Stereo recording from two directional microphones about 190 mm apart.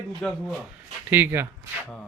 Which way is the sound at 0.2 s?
Centre (ahead or behind).